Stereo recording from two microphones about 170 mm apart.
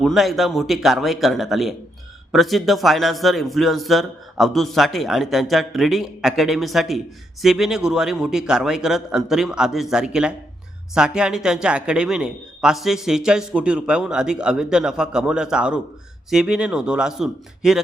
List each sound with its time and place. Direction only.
0.0 s speech: centre (ahead or behind)